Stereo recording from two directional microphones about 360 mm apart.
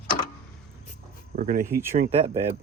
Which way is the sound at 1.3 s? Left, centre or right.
Right.